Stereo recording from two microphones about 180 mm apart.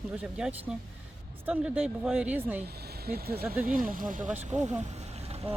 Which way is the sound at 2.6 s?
60° right (ahead or behind).